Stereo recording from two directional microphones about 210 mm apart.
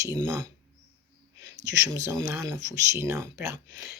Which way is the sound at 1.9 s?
15° right (ahead or behind).